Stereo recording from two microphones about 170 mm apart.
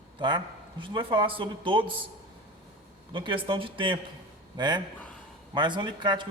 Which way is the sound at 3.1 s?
30° right (ahead or behind).